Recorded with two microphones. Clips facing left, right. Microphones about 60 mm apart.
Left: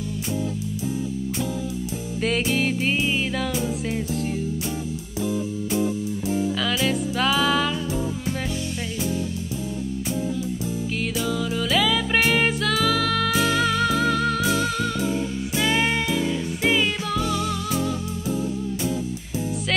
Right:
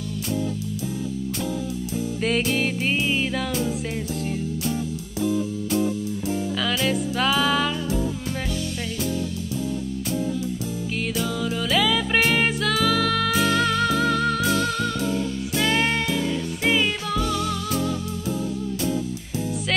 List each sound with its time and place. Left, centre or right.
2.1 s music: centre
11.0 s music: centre